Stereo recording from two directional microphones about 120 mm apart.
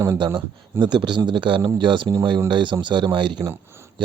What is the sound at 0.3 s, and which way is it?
Speech, 40° right (ahead or behind).